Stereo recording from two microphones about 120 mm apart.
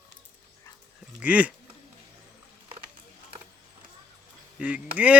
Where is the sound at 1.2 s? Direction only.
10° right (ahead or behind).